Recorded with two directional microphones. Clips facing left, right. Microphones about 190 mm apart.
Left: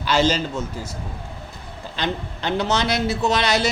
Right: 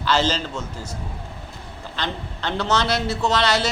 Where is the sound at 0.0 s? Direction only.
10° left (ahead or behind).